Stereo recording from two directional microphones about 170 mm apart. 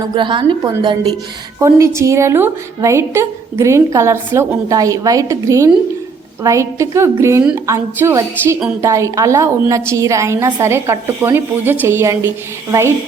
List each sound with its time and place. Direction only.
0.1 s a woman's voice: 25° right (ahead or behind)